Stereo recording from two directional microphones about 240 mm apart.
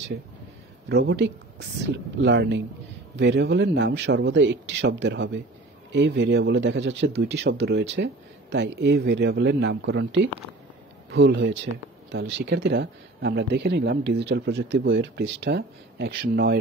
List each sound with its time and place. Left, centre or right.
0.8 s speech: right